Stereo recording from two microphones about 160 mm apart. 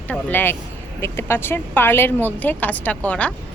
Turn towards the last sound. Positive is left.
turn(degrees=10)  # may be behind; listen again after turning